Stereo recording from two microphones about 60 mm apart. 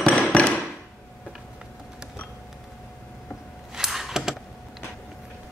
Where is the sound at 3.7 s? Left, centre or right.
Centre.